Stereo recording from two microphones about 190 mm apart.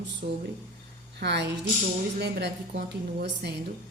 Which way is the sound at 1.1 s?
60° right (ahead or behind).